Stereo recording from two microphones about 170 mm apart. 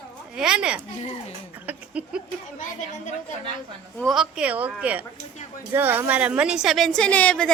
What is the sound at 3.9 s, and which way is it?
A woman's voice, centre (ahead or behind).